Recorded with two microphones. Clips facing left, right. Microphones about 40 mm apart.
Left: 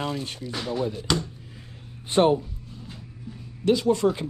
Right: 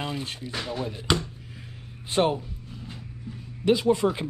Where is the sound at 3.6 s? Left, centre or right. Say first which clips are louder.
Left 1 dB; centre.